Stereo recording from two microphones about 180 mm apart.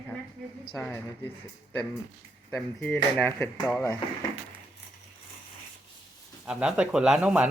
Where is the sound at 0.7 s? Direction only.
10° left (ahead or behind).